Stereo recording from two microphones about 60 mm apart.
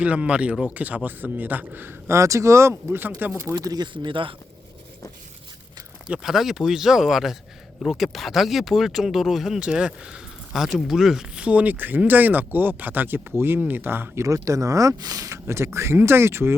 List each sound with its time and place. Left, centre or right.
0.0 s speech: right
2.0 s speech: right
3.5 s speech: right
6.2 s speech: centre
9.6 s speech: centre
11.4 s speech: right
14.3 s speech: right
15.4 s speech: right